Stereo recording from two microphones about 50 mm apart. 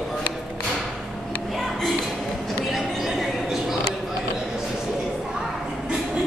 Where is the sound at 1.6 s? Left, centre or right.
Centre.